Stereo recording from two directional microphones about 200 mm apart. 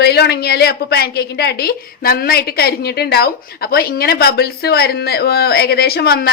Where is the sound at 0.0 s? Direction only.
55° left (ahead or behind).